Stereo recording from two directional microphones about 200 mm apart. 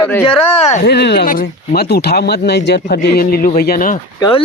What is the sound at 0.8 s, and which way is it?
Speech, 55° left (ahead or behind).